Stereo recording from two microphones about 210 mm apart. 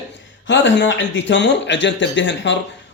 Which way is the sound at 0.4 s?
60° left (ahead or behind).